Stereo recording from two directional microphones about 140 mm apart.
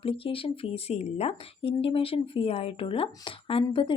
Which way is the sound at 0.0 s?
40° left (ahead or behind).